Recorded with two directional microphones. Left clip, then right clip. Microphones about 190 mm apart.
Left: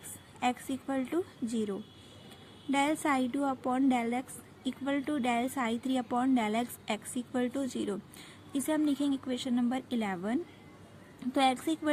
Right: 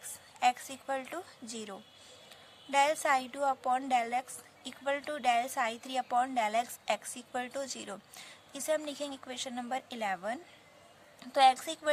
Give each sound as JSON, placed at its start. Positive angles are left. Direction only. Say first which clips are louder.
{"t": 0.3, "sound": "a woman's voice", "louder": "right 3 dB", "side_deg": -45}